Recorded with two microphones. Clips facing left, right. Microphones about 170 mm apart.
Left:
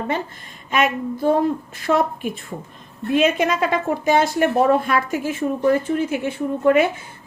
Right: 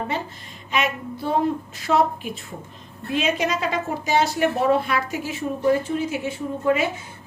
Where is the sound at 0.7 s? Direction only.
50° left (ahead or behind).